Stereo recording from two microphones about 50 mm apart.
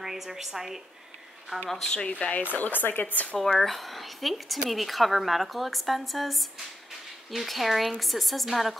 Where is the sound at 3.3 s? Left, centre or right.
Centre.